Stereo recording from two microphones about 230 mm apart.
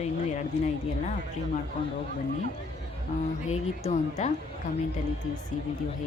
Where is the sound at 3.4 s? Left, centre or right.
Left.